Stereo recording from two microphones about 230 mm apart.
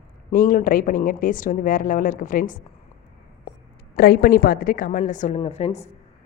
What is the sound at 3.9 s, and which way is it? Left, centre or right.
A woman's voice, left.